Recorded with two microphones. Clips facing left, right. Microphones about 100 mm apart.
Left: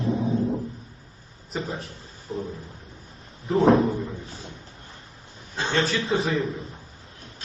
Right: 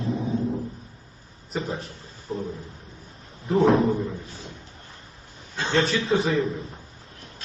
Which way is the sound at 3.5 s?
Centre (ahead or behind).